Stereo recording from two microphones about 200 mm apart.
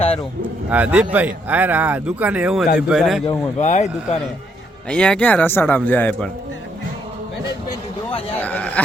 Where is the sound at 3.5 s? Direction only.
35° left (ahead or behind).